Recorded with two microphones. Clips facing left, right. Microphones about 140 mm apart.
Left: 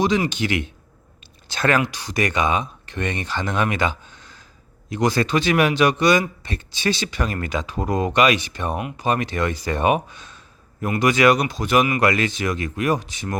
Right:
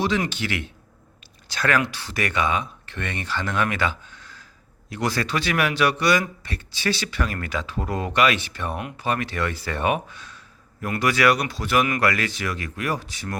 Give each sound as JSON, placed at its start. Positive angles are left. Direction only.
{"t": 0.3, "sound": "speech", "side_deg": 20}